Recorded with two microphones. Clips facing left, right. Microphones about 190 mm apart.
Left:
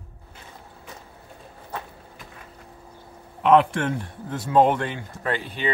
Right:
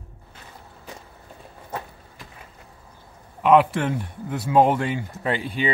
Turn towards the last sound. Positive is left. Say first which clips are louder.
# right 3 dB
turn(degrees=-10)  # may be behind; listen again after turning